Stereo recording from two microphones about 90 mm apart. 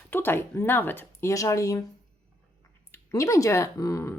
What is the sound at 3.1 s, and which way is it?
Speech, 35° left (ahead or behind).